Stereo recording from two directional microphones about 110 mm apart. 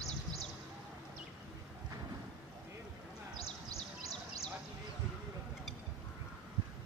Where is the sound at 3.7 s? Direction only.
70° left (ahead or behind).